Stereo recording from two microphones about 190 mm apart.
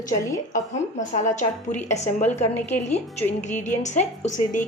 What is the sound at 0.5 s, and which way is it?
A woman's voice, 40° left (ahead or behind).